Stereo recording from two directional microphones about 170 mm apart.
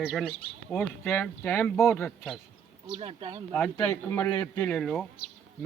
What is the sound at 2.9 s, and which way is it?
Speech, 35° right (ahead or behind).